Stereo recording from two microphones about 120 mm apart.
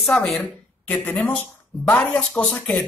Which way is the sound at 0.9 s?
15° left (ahead or behind).